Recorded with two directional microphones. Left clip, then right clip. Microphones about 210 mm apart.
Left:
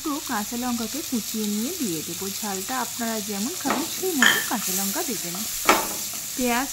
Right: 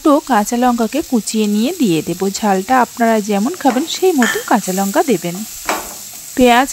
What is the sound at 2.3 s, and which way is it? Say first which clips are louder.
Speech: right 17 dB; 40° right (ahead or behind).